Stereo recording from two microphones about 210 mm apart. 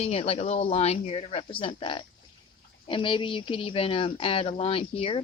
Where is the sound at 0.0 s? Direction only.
30° left (ahead or behind).